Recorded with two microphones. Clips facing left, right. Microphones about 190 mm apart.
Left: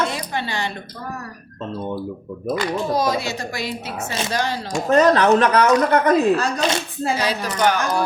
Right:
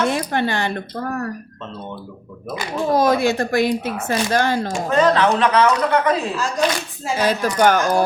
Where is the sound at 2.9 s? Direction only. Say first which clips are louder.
Right 9 dB; 55° right (ahead or behind).